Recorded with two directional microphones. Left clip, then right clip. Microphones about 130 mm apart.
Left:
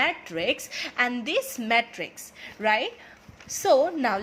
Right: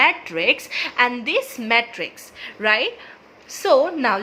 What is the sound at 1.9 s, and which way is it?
A woman's voice, 20° left (ahead or behind).